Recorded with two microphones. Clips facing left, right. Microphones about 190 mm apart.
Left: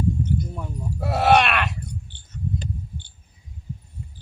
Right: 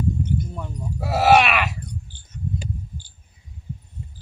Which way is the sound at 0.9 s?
5° right (ahead or behind).